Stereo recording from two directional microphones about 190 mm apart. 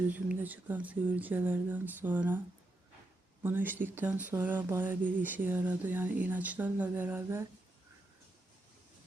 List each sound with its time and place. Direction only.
0.1 s speech: 10° right (ahead or behind)
3.4 s speech: 10° right (ahead or behind)